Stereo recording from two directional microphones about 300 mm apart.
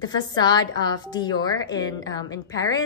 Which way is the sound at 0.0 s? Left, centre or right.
Centre.